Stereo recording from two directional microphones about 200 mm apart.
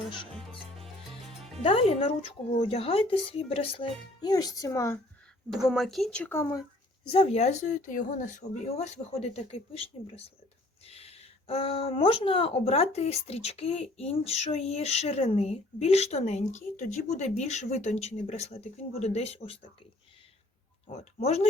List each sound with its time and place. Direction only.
1.6 s a child's voice: 25° left (ahead or behind)
5.5 s speech: centre (ahead or behind)
7.1 s speech: 30° left (ahead or behind)
20.9 s speech: 30° left (ahead or behind)